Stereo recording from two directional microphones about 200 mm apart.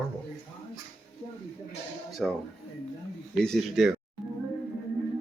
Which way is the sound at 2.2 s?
Centre (ahead or behind).